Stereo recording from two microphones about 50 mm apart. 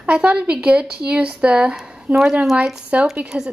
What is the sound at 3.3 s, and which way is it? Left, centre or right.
Speech, right.